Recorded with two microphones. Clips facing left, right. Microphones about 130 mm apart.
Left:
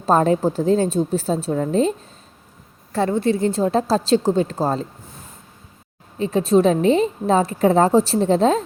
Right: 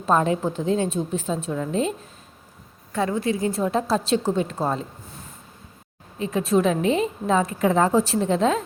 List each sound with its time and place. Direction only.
0.0 s a woman's voice: 35° left (ahead or behind)
6.1 s a woman's voice: 30° left (ahead or behind)